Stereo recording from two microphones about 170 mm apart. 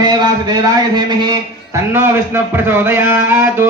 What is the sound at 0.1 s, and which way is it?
A man's voice, 25° right (ahead or behind).